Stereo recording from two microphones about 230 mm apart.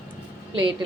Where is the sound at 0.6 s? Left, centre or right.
Right.